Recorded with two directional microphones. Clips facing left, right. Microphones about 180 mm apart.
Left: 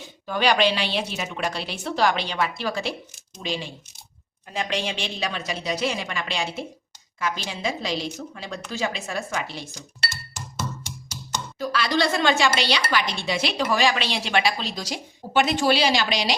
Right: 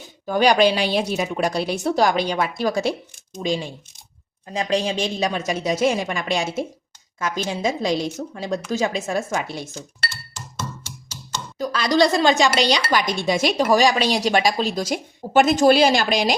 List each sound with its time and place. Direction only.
0.3 s speech: 45° right (ahead or behind)
10.6 s music: 15° left (ahead or behind)
11.5 s speech: 40° right (ahead or behind)